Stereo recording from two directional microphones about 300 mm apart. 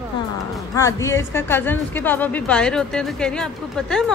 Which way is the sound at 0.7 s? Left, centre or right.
Centre.